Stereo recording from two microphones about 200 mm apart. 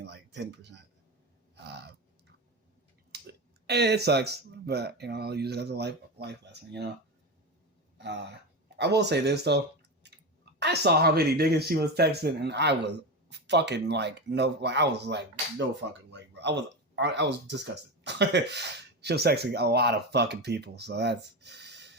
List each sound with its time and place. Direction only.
0.0 s a sound: 60° right (ahead or behind)
3.1 s clicking: 55° right (ahead or behind)
3.7 s speech: 55° right (ahead or behind)
7.9 s speech: 60° right (ahead or behind)
10.0 s a sound: 60° right (ahead or behind)
10.6 s speech: 55° right (ahead or behind)